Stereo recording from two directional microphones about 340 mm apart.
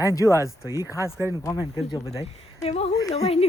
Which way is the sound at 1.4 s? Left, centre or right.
Centre.